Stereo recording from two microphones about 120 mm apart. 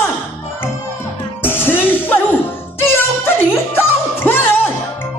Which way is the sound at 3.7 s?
20° left (ahead or behind).